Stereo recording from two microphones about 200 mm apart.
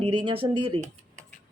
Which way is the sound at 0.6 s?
25° right (ahead or behind).